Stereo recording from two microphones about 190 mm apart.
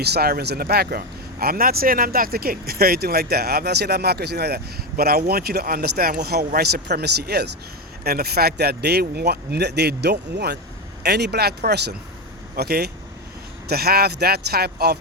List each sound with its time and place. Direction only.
0.0 s speech: 55° right (ahead or behind)